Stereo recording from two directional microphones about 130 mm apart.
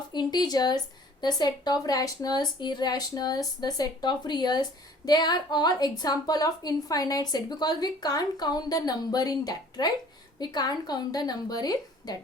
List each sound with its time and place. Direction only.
0.1 s a woman's voice: 35° left (ahead or behind)